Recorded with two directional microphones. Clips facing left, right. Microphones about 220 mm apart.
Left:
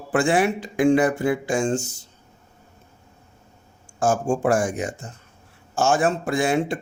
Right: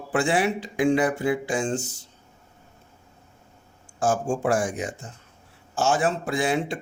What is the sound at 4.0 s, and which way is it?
Speech, 45° left (ahead or behind).